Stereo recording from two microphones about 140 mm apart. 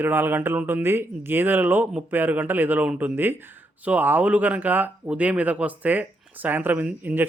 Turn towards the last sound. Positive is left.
turn(degrees=-15)  # may be behind; listen again after turning